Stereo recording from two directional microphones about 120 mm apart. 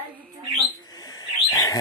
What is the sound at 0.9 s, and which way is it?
Bird, 30° left (ahead or behind).